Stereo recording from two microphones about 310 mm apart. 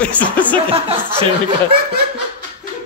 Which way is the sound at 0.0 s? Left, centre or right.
Centre.